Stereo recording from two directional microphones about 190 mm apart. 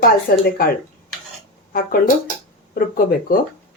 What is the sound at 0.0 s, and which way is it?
Speech, 50° left (ahead or behind).